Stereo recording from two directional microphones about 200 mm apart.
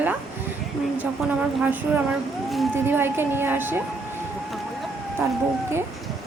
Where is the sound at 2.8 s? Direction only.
10° right (ahead or behind).